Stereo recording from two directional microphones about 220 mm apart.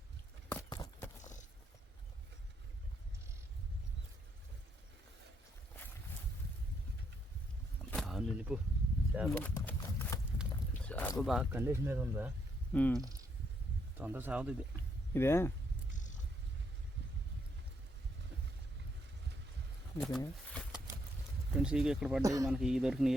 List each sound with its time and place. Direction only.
0.7 s a sound: 15° left (ahead or behind)
1.2 s vehicle: 35° left (ahead or behind)
7.9 s a sound: centre (ahead or behind)
9.3 s speech: 10° left (ahead or behind); by 12.3 s 10° right (ahead or behind)
12.7 s speech: 5° left (ahead or behind)
13.0 s speech: 15° right (ahead or behind)
15.1 s speech: 10° left (ahead or behind)
15.9 s cat: 35° left (ahead or behind)
20.0 s speech: centre (ahead or behind)
22.2 s speech: 15° right (ahead or behind)
22.4 s speech: centre (ahead or behind)